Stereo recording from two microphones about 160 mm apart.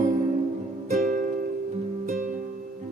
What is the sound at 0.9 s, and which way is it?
Music, 55° right (ahead or behind).